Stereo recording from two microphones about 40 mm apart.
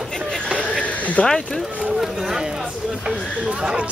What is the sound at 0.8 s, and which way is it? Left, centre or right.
Sheep, left.